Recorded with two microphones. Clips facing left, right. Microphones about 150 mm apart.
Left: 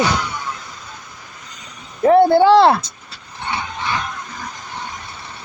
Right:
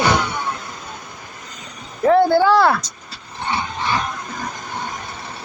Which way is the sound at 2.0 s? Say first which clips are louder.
Left 3 dB; 25° left (ahead or behind).